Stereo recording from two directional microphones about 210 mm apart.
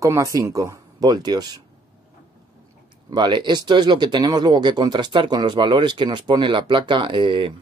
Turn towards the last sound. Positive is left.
turn(degrees=-25)  # may be behind; listen again after turning